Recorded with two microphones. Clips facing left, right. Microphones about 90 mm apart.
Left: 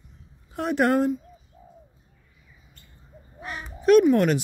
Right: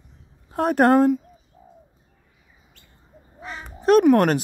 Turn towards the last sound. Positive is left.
turn(degrees=-50)  # may be behind; listen again after turning